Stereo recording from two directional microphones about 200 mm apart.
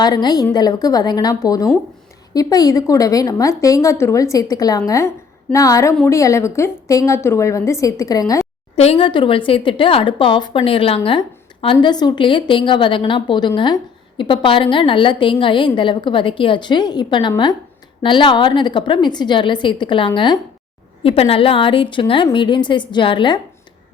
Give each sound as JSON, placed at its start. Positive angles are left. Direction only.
{"t": 0.0, "sound": "a woman's voice", "side_deg": 20}
{"t": 8.7, "sound": "a woman's voice", "side_deg": 30}